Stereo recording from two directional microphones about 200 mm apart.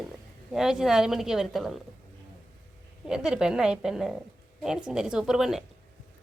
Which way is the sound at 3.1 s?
5° right (ahead or behind).